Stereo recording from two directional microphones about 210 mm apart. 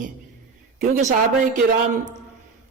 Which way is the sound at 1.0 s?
35° right (ahead or behind).